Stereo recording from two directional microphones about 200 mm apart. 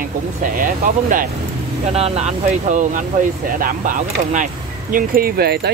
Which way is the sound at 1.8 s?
30° right (ahead or behind).